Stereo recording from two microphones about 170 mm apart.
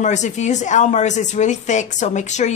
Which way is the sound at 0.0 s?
45° left (ahead or behind).